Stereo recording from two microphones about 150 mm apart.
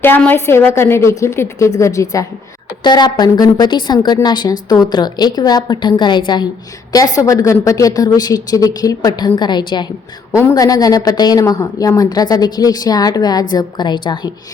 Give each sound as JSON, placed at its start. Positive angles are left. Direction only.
{"t": 0.0, "sound": "a woman's voice", "side_deg": 15}